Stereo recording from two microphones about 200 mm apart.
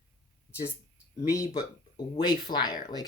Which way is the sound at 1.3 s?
15° left (ahead or behind).